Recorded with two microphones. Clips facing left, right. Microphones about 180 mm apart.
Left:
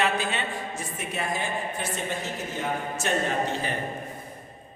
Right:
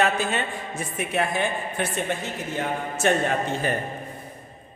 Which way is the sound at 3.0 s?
60° right (ahead or behind).